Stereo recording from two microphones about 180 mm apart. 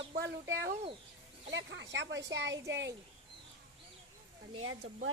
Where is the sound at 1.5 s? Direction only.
90° right.